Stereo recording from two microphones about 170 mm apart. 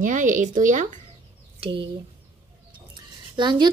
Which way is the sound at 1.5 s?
30° right (ahead or behind).